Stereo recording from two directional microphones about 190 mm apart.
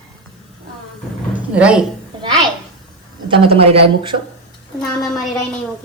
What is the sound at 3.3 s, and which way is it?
Speech, 30° right (ahead or behind).